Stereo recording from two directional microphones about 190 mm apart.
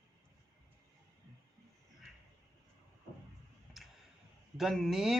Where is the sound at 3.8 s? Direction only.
Centre (ahead or behind).